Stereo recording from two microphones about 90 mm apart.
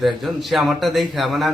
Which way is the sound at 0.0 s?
Centre (ahead or behind).